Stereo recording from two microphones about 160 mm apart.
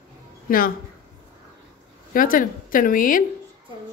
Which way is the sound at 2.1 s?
60° left (ahead or behind).